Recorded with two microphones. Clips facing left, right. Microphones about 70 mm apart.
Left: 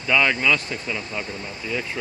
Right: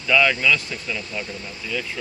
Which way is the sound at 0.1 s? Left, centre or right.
Left.